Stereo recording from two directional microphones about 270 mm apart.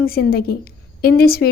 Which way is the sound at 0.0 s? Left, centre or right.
Left.